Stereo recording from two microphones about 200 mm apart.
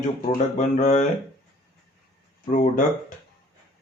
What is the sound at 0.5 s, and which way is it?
Speech, 35° left (ahead or behind).